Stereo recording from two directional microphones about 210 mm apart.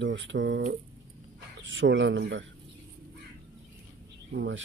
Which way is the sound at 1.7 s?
60° right (ahead or behind).